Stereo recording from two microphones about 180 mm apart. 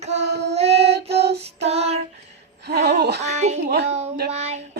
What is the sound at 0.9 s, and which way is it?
Child singing, 65° right (ahead or behind).